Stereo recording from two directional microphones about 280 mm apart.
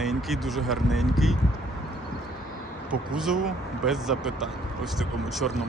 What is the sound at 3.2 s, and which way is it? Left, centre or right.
Speech, centre.